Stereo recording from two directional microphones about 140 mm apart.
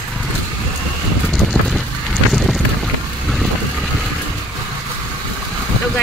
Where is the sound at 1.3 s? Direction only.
Centre (ahead or behind).